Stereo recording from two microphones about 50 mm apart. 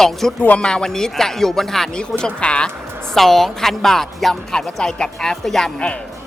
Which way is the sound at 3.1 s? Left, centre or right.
Centre.